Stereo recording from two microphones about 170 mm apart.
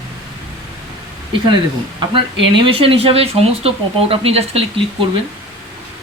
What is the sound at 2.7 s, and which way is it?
Speech, 35° right (ahead or behind).